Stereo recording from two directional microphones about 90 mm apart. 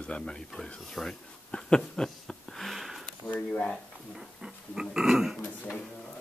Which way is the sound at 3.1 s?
20° left (ahead or behind).